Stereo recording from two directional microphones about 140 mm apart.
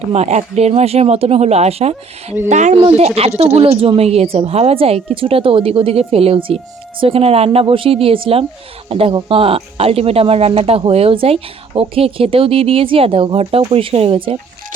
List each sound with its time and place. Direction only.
0.1 s speech: 50° right (ahead or behind)
2.7 s speech: 40° right (ahead or behind)